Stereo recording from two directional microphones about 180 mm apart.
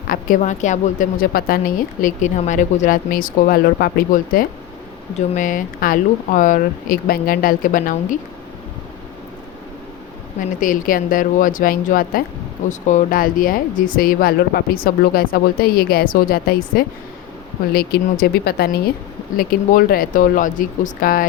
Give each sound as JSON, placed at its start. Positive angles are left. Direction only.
{"t": 0.1, "sound": "a woman's voice", "side_deg": 50}
{"t": 10.6, "sound": "a woman's voice", "side_deg": 50}